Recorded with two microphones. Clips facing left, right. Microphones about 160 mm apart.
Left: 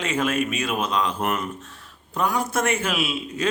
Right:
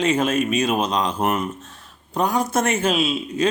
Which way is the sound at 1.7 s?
40° right (ahead or behind).